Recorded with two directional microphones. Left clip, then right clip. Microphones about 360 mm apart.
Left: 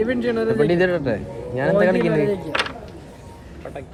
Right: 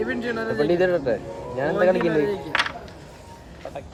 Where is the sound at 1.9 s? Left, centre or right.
Left.